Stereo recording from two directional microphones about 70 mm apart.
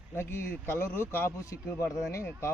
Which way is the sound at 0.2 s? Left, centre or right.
Left.